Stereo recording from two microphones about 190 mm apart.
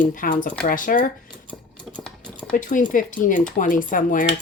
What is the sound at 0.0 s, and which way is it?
Speech, 45° left (ahead or behind).